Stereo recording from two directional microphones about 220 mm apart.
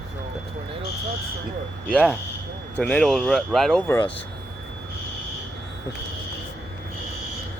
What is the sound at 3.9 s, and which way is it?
Speech, 10° left (ahead or behind).